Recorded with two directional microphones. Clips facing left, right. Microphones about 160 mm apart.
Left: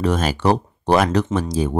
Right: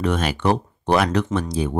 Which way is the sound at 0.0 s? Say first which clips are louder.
Left 2 dB; 40° left (ahead or behind).